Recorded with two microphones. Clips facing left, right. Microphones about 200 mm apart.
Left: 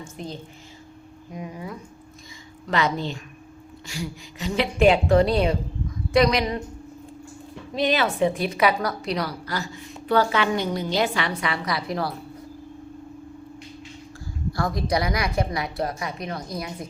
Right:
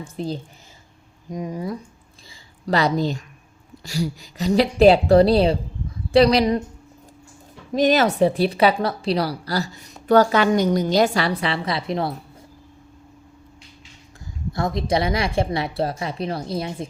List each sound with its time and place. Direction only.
0.2 s a woman's voice: 35° right (ahead or behind)
7.7 s a woman's voice: 45° right (ahead or behind); by 12.1 s 25° right (ahead or behind)
14.5 s a woman's voice: 25° right (ahead or behind)